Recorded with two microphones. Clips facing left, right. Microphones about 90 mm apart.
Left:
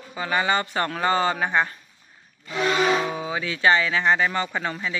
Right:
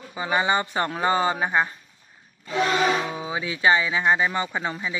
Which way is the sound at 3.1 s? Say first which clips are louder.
Left 1 dB; 15° right (ahead or behind).